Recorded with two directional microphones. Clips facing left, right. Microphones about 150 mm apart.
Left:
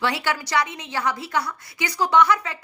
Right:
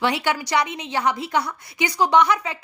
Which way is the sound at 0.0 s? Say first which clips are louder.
Right 2 dB; 20° right (ahead or behind).